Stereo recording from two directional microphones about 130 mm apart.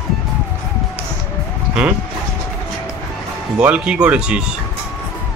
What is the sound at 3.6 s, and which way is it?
Speech, 10° right (ahead or behind).